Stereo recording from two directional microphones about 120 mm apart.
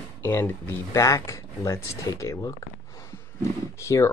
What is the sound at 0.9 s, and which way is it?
Speech, 25° left (ahead or behind).